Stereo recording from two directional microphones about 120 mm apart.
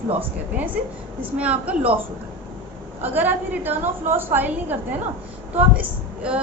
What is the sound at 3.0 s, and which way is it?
A woman's voice, 15° right (ahead or behind).